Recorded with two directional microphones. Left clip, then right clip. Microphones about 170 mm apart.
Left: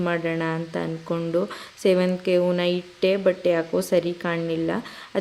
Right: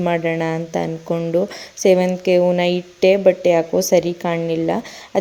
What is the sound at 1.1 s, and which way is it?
A woman's voice, 15° right (ahead or behind).